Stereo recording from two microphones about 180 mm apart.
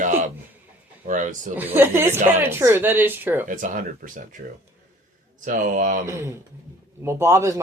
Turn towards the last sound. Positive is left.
turn(degrees=-15)  # may be behind; listen again after turning